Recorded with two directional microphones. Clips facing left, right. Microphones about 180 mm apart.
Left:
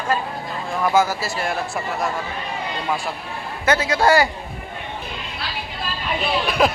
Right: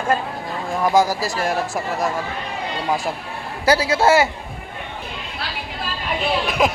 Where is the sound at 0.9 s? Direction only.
35° right (ahead or behind).